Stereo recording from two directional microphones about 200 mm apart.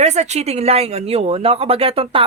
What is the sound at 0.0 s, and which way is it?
Speech, 35° right (ahead or behind).